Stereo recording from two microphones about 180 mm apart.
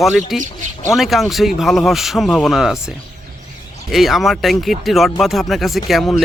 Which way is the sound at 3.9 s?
Centre (ahead or behind).